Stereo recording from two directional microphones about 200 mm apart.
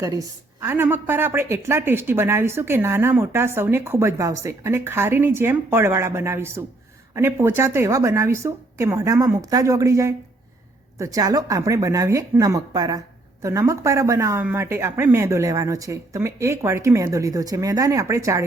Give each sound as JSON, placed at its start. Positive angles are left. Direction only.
{"t": 0.0, "sound": "speech", "side_deg": -15}